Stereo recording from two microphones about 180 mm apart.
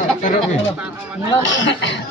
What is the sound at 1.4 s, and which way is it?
Speech, 90° left.